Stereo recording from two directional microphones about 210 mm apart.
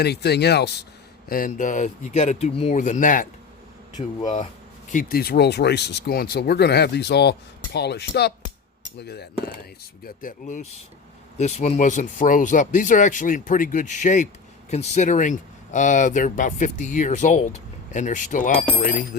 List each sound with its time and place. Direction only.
0.0 s speech: 50° left (ahead or behind)
1.3 s speech: 40° left (ahead or behind)
10.0 s speech: 40° left (ahead or behind)